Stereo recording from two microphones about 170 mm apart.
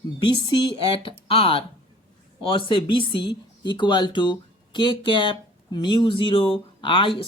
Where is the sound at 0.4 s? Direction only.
25° left (ahead or behind).